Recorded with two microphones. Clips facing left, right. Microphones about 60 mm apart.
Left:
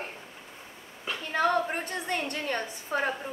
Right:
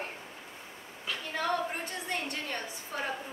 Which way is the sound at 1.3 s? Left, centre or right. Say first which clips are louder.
Left 6 dB; left.